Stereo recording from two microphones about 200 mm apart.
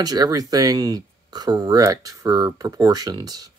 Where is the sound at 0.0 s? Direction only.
20° right (ahead or behind).